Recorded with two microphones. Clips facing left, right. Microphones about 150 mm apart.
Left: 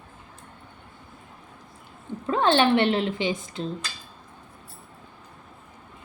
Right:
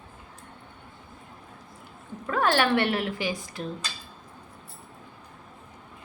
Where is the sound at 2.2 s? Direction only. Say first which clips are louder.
Left 3 dB; 25° left (ahead or behind).